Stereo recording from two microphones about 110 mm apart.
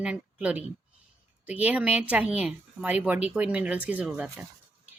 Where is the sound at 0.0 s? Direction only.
10° right (ahead or behind).